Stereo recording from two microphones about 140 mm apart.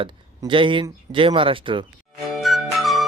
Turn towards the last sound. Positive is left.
turn(degrees=0)  # may be behind; listen again after turning